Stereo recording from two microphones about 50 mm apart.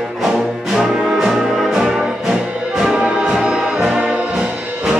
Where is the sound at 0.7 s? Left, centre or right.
Centre.